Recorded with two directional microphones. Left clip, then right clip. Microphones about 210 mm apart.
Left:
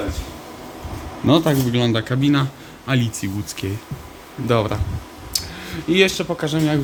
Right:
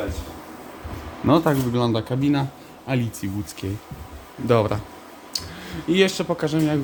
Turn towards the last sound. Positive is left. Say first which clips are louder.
# left 1 dB
turn(degrees=-10)  # may be behind; listen again after turning